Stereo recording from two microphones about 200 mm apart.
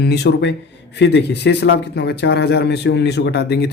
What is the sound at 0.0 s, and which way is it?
Speech, 55° left (ahead or behind).